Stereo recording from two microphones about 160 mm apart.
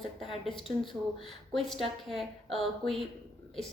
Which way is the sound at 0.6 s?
30° left (ahead or behind).